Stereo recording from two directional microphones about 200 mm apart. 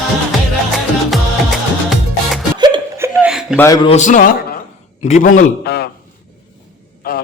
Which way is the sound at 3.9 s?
40° left (ahead or behind).